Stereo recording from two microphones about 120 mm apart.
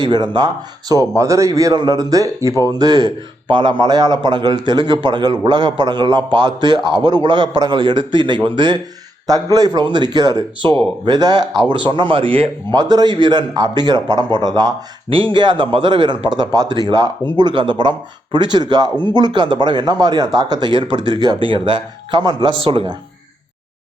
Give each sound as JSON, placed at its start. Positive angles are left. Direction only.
{"t": 0.0, "sound": "a man's voice", "side_deg": -35}
{"t": 12.7, "sound": "a man's voice", "side_deg": -35}
{"t": 15.1, "sound": "a man's voice", "side_deg": -45}
{"t": 22.6, "sound": "speech", "side_deg": -50}